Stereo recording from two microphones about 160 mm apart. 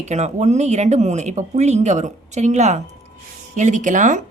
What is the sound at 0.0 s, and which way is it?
A woman's voice, 45° right (ahead or behind).